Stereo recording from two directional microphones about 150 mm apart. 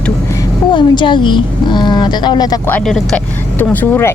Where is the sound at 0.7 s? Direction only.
30° left (ahead or behind).